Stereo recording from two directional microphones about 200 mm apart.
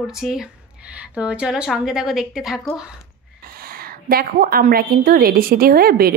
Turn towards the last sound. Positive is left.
turn(degrees=-50)  # may be behind; listen again after turning